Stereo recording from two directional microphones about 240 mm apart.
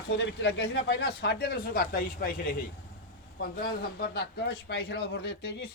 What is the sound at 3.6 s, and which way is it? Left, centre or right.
A man's voice, left.